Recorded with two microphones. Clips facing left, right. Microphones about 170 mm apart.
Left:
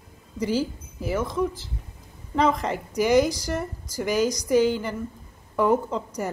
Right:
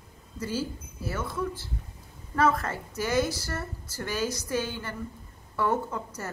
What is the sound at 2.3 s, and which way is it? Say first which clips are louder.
A woman's voice: left 3 dB; 15° left (ahead or behind).